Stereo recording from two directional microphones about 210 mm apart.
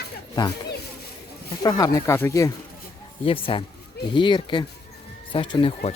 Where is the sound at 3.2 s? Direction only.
25° left (ahead or behind).